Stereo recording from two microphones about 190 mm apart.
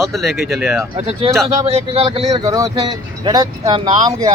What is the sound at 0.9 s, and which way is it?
Speech, 30° right (ahead or behind).